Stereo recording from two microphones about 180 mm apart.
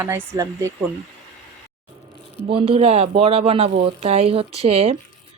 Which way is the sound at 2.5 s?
30° right (ahead or behind).